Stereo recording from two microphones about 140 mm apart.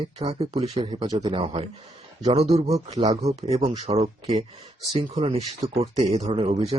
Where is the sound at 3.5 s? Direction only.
40° right (ahead or behind).